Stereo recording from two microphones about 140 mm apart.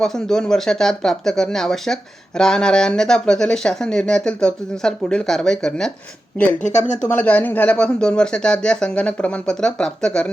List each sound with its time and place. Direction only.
0.0 s speech: 5° left (ahead or behind)
6.6 s speech: 60° left (ahead or behind)
7.1 s speech: 10° left (ahead or behind)